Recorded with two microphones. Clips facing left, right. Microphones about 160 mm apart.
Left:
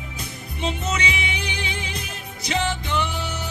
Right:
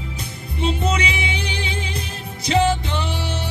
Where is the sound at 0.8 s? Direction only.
30° right (ahead or behind).